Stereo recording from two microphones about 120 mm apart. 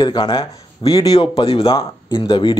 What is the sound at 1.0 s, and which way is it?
Speech, 35° left (ahead or behind).